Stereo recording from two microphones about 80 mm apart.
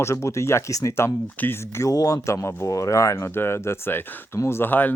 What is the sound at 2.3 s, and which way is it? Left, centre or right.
Speech, left.